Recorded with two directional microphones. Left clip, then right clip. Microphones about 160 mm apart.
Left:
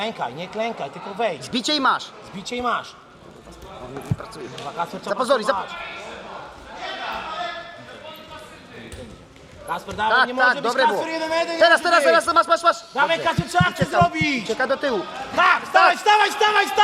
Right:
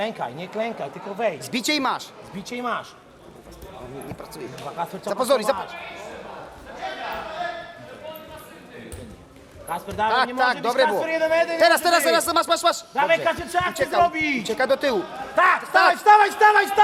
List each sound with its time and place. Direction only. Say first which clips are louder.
0.0 s a man's voice: left 1 dB; 5° left (ahead or behind)
4.8 s a man's voice: left 1 dB; centre (ahead or behind)
9.6 s a man's voice: left 1 dB; 5° left (ahead or behind)
12.9 s a man's voice: even; 10° left (ahead or behind)
14.6 s a man's voice: right 2 dB; 5° right (ahead or behind)